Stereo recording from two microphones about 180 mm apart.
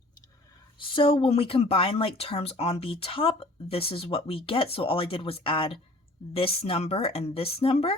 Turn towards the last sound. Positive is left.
turn(degrees=35)  # may be behind; listen again after turning